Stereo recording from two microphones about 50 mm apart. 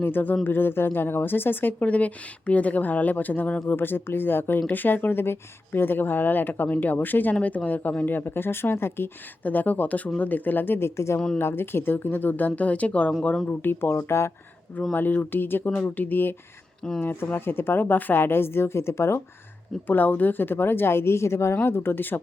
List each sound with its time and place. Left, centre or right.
0.0 s a woman's voice: left
1.8 s a woman's voice: left
9.4 s speech: left
10.8 s speech: left
11.3 s speech: left
13.6 s a woman's voice: left
13.9 s speech: left
14.9 s speech: left
15.7 s a woman's voice: left
19.9 s a woman's voice: left
21.6 s a woman's voice: left